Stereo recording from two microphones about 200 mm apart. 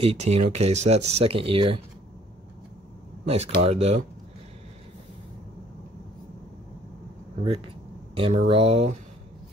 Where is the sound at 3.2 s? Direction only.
30° right (ahead or behind).